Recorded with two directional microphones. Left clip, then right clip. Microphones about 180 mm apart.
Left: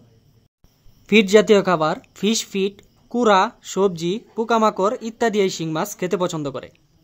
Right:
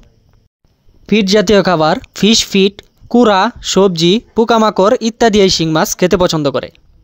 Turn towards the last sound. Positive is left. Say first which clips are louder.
# right 11 dB
turn(degrees=-40)  # may be behind; listen again after turning